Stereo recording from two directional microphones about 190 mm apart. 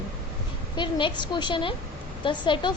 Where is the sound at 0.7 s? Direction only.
25° left (ahead or behind).